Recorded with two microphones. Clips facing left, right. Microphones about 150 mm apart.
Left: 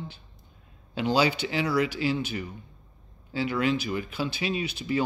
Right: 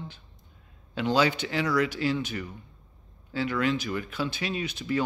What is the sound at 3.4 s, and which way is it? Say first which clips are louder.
A man's voice: left 1 dB; 10° left (ahead or behind).